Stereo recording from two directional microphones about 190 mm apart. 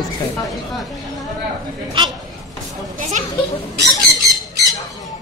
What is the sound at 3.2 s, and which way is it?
Children playing, 40° right (ahead or behind).